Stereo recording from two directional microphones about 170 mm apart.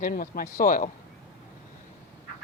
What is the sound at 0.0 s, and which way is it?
Speech, 55° left (ahead or behind).